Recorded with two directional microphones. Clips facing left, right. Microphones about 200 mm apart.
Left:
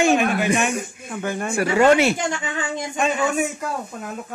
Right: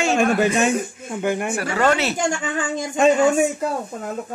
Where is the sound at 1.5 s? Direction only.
15° left (ahead or behind).